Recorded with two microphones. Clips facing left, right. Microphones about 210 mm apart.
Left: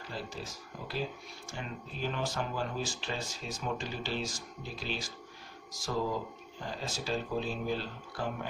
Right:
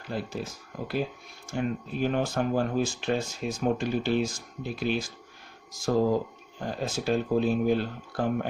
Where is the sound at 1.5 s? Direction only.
55° right (ahead or behind).